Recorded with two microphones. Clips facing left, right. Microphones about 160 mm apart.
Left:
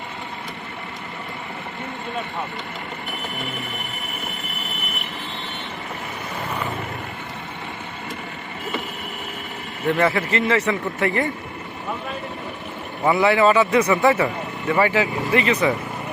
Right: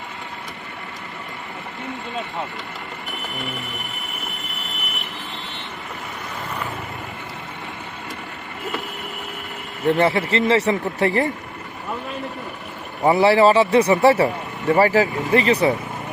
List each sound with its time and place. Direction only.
9.8 s speech: 30° right (ahead or behind)
13.1 s speech: 35° right (ahead or behind)